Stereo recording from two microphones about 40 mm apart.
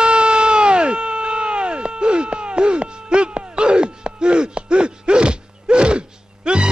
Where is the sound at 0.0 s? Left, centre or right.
Right.